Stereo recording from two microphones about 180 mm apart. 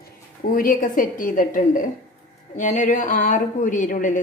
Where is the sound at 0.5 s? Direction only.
50° left (ahead or behind).